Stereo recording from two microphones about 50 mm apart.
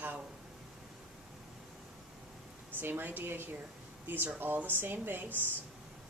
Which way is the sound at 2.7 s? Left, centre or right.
Right.